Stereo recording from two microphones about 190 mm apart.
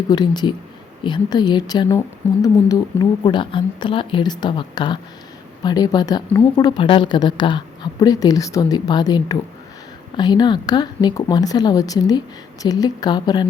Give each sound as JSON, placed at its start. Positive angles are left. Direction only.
{"t": 0.1, "sound": "speech", "side_deg": 20}